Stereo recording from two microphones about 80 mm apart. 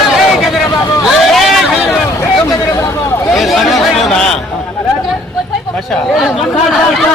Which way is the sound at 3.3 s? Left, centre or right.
Centre.